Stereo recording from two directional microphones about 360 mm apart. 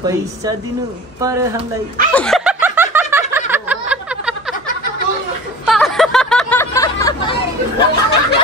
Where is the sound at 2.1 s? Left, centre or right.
Centre.